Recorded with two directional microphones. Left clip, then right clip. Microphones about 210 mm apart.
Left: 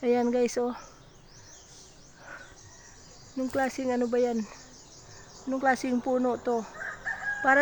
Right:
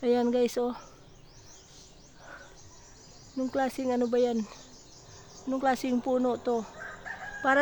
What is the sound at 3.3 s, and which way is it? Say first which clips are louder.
Speech: left 1 dB; centre (ahead or behind).